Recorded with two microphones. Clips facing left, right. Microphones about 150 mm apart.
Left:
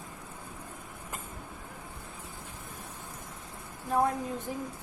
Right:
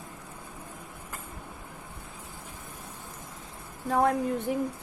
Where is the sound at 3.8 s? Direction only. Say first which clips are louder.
Right 4 dB; 75° right (ahead or behind).